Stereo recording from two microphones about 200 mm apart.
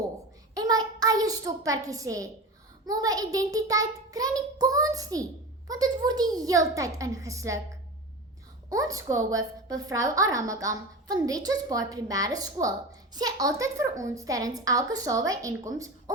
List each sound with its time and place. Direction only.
0.5 s a sound: 20° right (ahead or behind)
2.8 s a woman's voice: 20° right (ahead or behind)
8.7 s a woman's voice: 15° right (ahead or behind)